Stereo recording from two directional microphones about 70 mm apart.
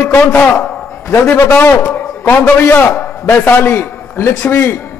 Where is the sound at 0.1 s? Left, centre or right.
Left.